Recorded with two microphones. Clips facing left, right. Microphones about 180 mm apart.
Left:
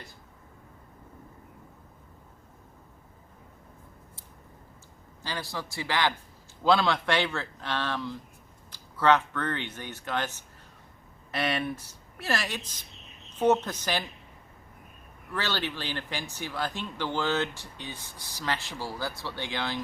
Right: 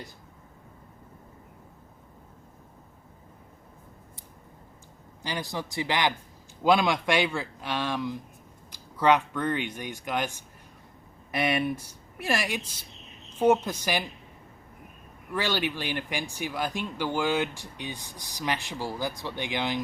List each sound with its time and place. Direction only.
5.2 s speech: 15° right (ahead or behind)
15.3 s speech: 15° right (ahead or behind)